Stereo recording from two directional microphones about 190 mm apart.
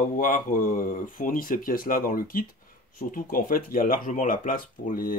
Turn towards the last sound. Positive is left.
turn(degrees=45)  # may be behind; listen again after turning